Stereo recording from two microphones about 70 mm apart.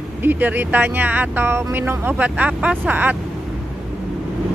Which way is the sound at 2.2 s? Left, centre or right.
Centre.